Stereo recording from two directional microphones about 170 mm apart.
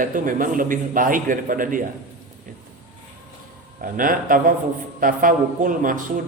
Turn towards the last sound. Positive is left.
turn(degrees=-50)  # may be behind; listen again after turning